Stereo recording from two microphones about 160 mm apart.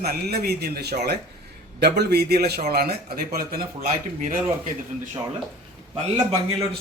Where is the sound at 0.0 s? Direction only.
80° right.